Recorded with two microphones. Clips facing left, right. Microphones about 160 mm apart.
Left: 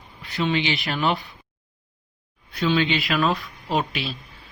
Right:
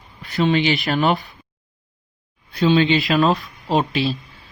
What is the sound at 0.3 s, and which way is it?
Speech, 45° right (ahead or behind).